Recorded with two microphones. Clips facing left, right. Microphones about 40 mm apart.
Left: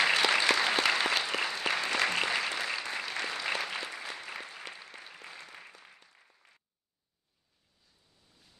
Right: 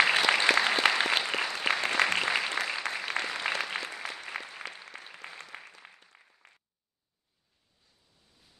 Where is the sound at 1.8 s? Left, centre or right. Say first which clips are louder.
Right 4 dB; right.